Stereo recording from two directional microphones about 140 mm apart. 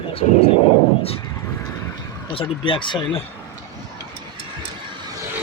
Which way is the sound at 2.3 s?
40° left (ahead or behind).